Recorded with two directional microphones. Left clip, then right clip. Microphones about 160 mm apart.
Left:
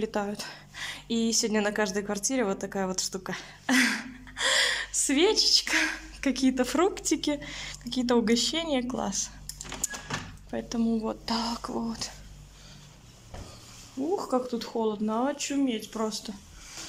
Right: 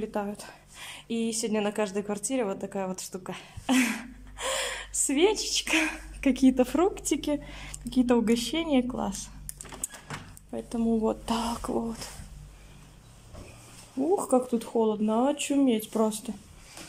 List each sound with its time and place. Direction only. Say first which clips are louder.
0.0 s speech: left 2 dB; 5° right (ahead or behind)
10.5 s speech: right 1 dB; 10° right (ahead or behind)
14.1 s speech: right 3 dB; 20° right (ahead or behind)